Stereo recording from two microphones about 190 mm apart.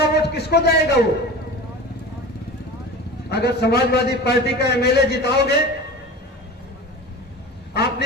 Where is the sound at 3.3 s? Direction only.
60° left (ahead or behind).